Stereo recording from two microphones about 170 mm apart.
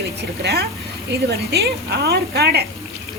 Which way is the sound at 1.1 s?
75° right (ahead or behind).